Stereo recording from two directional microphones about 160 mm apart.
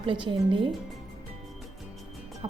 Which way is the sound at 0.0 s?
30° right (ahead or behind).